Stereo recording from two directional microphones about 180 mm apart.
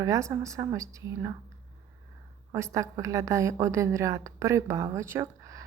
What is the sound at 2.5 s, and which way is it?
A woman's voice, 15° right (ahead or behind).